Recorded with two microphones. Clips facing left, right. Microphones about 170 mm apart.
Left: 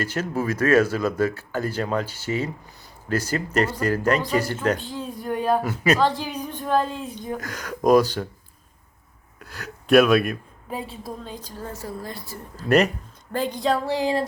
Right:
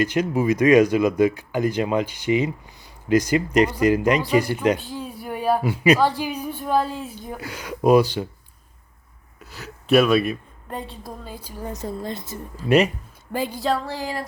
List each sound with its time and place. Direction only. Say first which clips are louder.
0.0 s speech: right 5 dB; 15° right (ahead or behind)
9.4 s speech: left 1 dB; 5° right (ahead or behind); by 12.4 s 20° right (ahead or behind)
12.5 s speech: right 1 dB; 10° right (ahead or behind)
13.9 s music: left 6 dB; 25° left (ahead or behind)